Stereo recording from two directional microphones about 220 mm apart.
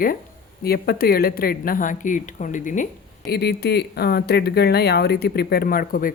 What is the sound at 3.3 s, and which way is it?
Speech, 45° left (ahead or behind).